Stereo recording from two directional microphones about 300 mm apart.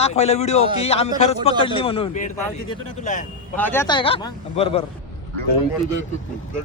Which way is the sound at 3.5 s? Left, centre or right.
Centre.